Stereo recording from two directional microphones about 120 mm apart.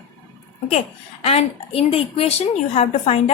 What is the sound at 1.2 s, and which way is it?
A woman's voice, 60° left (ahead or behind).